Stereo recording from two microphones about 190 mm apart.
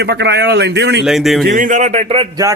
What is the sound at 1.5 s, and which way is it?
Speech, 40° right (ahead or behind).